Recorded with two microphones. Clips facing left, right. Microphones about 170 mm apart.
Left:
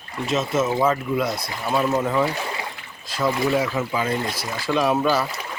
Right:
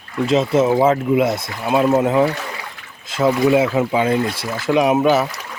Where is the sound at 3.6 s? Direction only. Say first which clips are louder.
Right 7 dB; 25° right (ahead or behind).